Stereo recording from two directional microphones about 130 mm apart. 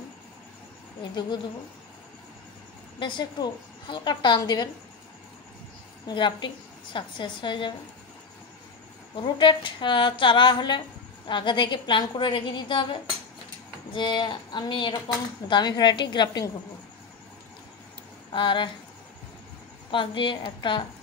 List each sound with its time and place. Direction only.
3.0 s a woman's voice: 35° left (ahead or behind)
6.0 s a woman's voice: 35° left (ahead or behind)
9.1 s a woman's voice: 40° left (ahead or behind)
18.3 s a woman's voice: 40° left (ahead or behind)
19.9 s a woman's voice: 40° left (ahead or behind)